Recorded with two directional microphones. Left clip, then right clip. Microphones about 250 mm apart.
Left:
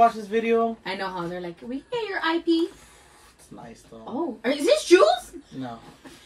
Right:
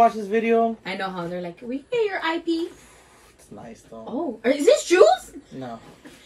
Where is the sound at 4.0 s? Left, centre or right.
Centre.